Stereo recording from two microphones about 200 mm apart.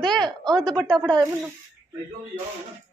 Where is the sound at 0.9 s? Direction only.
20° right (ahead or behind).